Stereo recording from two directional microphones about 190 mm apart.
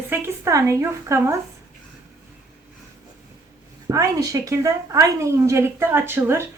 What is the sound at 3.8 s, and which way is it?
Speech, 15° right (ahead or behind).